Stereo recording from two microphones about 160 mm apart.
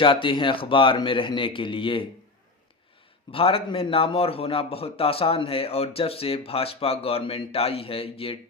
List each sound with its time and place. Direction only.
0.0 s a man's voice: 30° left (ahead or behind)
3.3 s a man's voice: 35° left (ahead or behind)